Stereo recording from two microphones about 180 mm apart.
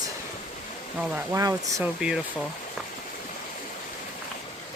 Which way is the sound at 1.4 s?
20° right (ahead or behind).